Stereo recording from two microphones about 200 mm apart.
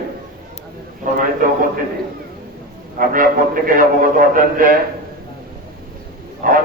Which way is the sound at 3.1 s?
45° right (ahead or behind).